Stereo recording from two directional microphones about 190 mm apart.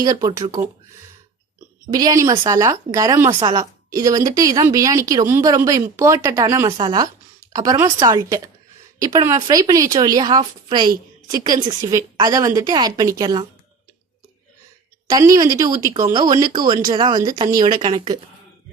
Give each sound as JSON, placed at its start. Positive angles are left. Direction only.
{"t": 0.0, "sound": "a woman's voice", "side_deg": -20}
{"t": 1.9, "sound": "a woman's voice", "side_deg": -20}
{"t": 15.1, "sound": "a woman's voice", "side_deg": -20}